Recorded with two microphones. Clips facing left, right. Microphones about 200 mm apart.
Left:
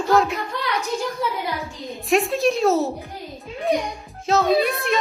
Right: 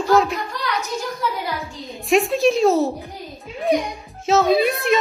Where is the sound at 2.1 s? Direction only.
Centre (ahead or behind).